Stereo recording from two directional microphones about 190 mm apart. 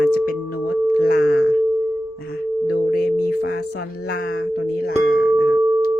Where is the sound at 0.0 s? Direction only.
50° left (ahead or behind).